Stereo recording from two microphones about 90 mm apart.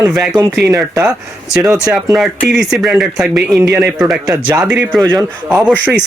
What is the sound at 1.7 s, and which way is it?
Speech, 10° right (ahead or behind).